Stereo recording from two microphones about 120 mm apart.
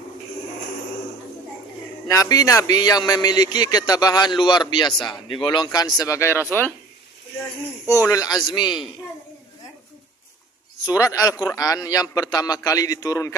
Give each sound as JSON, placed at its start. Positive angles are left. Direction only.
{"t": 2.0, "sound": "speech", "side_deg": 30}
{"t": 4.9, "sound": "speech", "side_deg": 0}
{"t": 5.3, "sound": "a man's voice", "side_deg": 45}
{"t": 8.1, "sound": "speech", "side_deg": 30}
{"t": 10.8, "sound": "a man's voice", "side_deg": 30}